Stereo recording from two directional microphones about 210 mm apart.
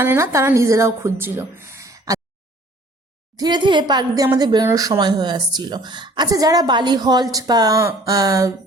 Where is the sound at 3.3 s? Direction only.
20° right (ahead or behind).